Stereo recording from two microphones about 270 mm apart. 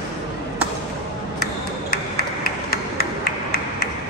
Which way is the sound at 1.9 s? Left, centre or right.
Left.